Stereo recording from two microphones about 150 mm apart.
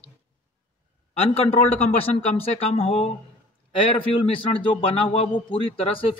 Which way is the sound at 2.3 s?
40° left (ahead or behind).